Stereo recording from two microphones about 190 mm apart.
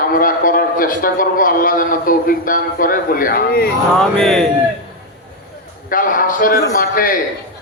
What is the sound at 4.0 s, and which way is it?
Speech, centre (ahead or behind).